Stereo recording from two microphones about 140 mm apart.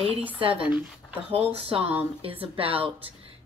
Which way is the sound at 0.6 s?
10° right (ahead or behind).